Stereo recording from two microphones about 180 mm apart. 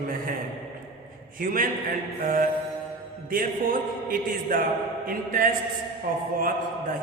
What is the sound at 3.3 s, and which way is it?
A man's voice, 50° right (ahead or behind).